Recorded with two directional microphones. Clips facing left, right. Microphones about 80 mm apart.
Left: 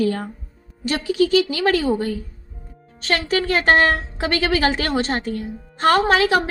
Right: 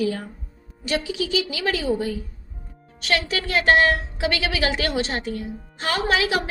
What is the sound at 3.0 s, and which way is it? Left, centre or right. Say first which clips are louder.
A woman's voice: left 3 dB; left.